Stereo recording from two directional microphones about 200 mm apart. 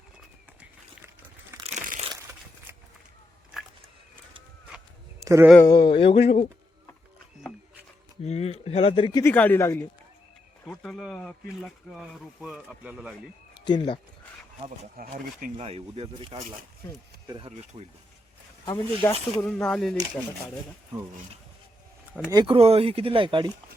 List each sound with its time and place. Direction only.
0.6 s crumpling: 15° right (ahead or behind)
1.6 s crunch: 35° right (ahead or behind)
5.2 s a sound: 15° right (ahead or behind)
5.6 s speech: 20° left (ahead or behind)
8.2 s speech: 30° left (ahead or behind)
9.2 s speech: 10° left (ahead or behind)
13.5 s speech: 20° left (ahead or behind)
15.0 s speech: 45° right (ahead or behind)
15.6 s speech: 30° right (ahead or behind)
18.6 s speech: 20° left (ahead or behind)
19.4 s speech: 5° left (ahead or behind)
22.3 s speech: 25° right (ahead or behind)